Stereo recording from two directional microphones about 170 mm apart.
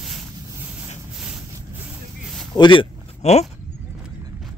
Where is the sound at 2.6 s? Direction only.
30° left (ahead or behind).